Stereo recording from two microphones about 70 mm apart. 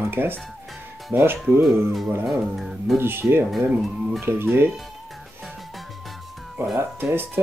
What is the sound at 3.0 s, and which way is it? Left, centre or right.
Speech, right.